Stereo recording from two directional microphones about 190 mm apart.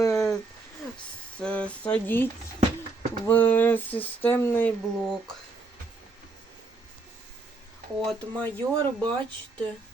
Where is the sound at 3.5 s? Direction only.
10° left (ahead or behind).